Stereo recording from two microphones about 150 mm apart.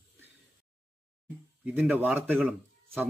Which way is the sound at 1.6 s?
10° right (ahead or behind).